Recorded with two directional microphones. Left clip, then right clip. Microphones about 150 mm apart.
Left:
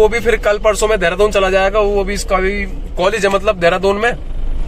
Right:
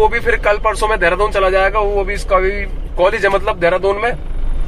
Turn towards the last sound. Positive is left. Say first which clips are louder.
# left 1 dB
turn(degrees=20)  # may be behind; listen again after turning